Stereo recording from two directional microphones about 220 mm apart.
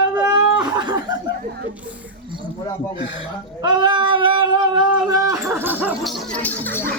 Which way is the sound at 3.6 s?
20° right (ahead or behind).